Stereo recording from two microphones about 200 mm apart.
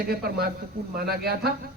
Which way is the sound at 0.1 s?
50° right (ahead or behind).